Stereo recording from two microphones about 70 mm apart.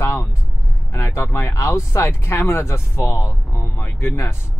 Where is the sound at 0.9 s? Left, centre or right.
Left.